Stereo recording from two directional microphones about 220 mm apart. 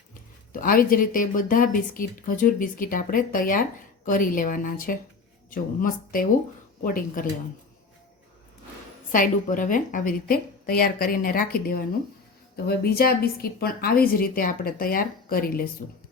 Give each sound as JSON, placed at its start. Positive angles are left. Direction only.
{"t": 0.6, "sound": "speech", "side_deg": 40}
{"t": 9.1, "sound": "a woman's voice", "side_deg": 40}